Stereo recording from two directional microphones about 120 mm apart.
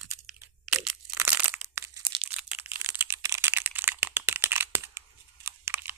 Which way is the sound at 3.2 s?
25° right (ahead or behind).